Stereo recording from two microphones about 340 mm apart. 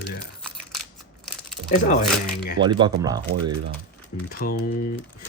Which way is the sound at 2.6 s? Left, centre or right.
Centre.